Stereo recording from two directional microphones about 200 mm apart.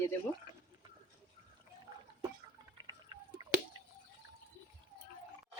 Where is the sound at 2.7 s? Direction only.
20° right (ahead or behind).